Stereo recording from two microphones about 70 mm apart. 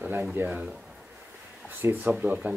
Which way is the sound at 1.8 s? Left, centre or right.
Right.